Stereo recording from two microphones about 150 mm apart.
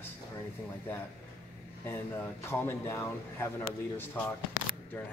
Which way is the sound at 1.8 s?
15° left (ahead or behind).